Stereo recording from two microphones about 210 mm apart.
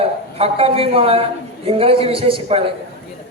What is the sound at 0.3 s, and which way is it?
Speech, 30° right (ahead or behind).